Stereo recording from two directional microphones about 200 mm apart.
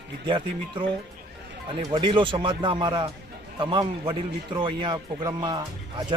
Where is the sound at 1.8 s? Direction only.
25° right (ahead or behind).